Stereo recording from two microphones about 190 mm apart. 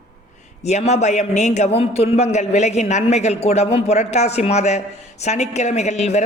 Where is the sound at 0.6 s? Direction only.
35° left (ahead or behind).